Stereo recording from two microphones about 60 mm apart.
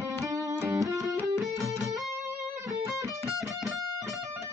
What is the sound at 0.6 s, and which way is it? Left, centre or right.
Music, right.